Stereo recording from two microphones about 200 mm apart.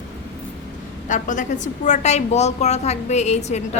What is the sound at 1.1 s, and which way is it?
A woman's voice, 40° left (ahead or behind).